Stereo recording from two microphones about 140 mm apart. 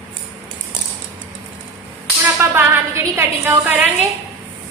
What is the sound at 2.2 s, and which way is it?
A woman's voice, 15° right (ahead or behind).